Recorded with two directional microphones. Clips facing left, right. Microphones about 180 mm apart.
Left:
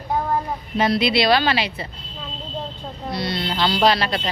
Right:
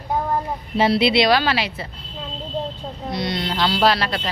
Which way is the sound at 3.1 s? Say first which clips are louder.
Right 1 dB; 20° right (ahead or behind).